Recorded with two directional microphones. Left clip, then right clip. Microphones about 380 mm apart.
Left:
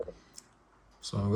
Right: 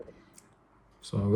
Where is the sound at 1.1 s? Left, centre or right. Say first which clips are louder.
Right 3 dB; centre.